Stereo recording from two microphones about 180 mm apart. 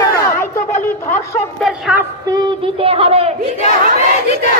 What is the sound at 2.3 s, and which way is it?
Speech, 25° right (ahead or behind).